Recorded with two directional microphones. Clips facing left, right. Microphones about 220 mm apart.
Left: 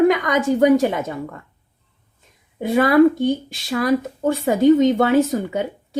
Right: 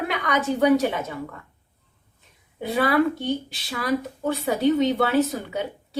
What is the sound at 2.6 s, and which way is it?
Speech, 45° left (ahead or behind).